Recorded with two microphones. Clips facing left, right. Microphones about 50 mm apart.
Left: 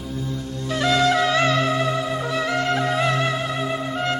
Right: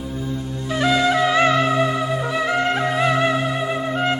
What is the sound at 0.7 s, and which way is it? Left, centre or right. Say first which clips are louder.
Music: right 1 dB; centre.